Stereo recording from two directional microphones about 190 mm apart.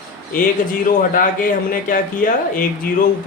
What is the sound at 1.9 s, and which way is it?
Speech, 45° left (ahead or behind).